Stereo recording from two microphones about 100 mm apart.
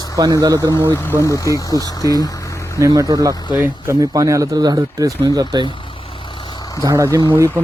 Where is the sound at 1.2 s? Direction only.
35° left (ahead or behind).